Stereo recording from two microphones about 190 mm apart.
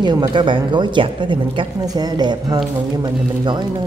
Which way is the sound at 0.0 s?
20° right (ahead or behind).